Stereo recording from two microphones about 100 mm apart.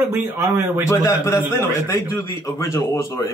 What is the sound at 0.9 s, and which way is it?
Speech, 35° left (ahead or behind).